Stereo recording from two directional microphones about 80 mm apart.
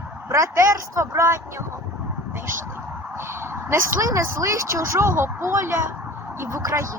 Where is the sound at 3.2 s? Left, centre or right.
Right.